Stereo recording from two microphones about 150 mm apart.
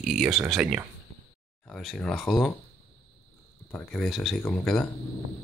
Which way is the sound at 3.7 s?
5° left (ahead or behind).